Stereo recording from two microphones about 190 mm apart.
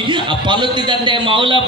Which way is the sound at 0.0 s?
25° right (ahead or behind).